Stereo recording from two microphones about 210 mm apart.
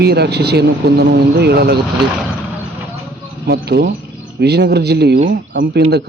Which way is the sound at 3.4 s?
50° right (ahead or behind).